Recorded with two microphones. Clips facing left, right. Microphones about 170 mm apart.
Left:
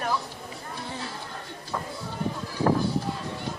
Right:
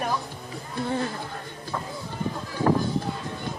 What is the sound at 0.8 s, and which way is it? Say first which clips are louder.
Speech: right 11 dB; 55° right (ahead or behind).